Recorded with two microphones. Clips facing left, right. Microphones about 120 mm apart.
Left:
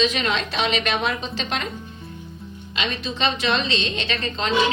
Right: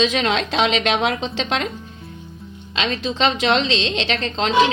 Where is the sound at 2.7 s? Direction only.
90° right.